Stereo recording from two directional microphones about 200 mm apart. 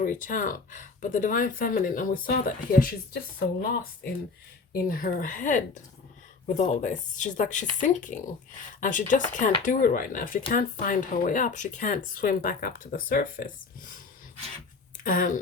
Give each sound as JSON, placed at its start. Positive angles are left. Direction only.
{"t": 0.0, "sound": "speech", "side_deg": 40}
{"t": 4.7, "sound": "speech", "side_deg": 45}
{"t": 14.9, "sound": "speech", "side_deg": 40}